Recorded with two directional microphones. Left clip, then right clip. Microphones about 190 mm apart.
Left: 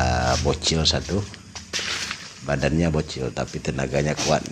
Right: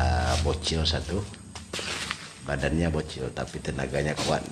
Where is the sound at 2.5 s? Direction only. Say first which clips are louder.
Left 5 dB; 20° left (ahead or behind).